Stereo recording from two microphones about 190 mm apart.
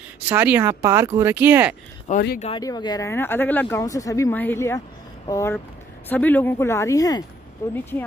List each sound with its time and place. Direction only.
0.3 s speech: 10° right (ahead or behind)
2.1 s speech: 40° left (ahead or behind)
2.5 s speech: 20° left (ahead or behind)